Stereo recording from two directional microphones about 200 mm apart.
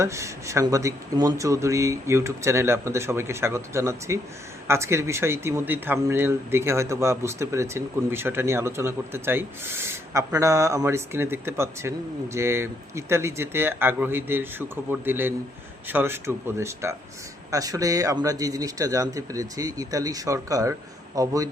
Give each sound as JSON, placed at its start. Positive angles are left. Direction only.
{"t": 0.0, "sound": "speech", "side_deg": -15}